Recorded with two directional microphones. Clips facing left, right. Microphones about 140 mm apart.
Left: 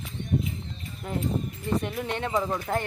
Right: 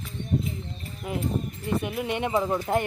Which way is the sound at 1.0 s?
5° right (ahead or behind).